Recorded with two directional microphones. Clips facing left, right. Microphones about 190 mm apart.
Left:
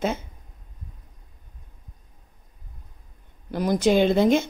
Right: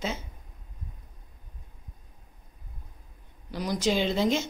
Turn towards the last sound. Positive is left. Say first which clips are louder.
# left 7 dB
turn(degrees=55)  # may be behind; listen again after turning